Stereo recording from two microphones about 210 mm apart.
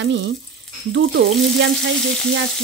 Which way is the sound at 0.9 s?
55° right (ahead or behind).